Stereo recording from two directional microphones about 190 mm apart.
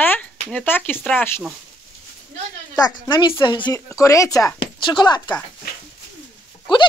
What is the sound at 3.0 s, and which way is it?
Speech, 20° left (ahead or behind).